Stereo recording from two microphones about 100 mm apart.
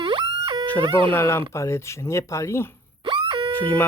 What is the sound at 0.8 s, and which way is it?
Speech, 60° right (ahead or behind).